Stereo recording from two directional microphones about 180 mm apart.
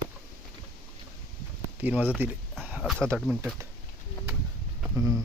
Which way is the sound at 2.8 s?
5° left (ahead or behind).